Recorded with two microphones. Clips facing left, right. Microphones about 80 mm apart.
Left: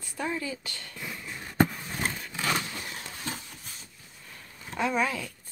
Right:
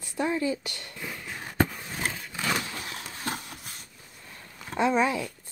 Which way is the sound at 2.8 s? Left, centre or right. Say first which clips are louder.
Right 3 dB; right.